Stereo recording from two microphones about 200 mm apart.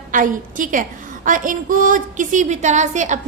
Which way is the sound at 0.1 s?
40° right (ahead or behind).